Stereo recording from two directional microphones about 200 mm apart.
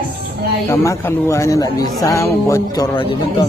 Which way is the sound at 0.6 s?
15° left (ahead or behind).